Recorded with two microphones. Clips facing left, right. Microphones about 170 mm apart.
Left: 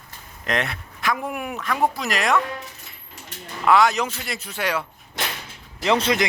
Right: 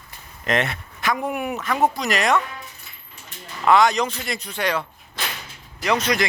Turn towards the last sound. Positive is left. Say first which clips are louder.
# left 1 dB
turn(degrees=25)  # may be behind; listen again after turning